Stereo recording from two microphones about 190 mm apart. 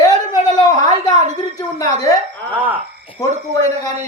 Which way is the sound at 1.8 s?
15° left (ahead or behind).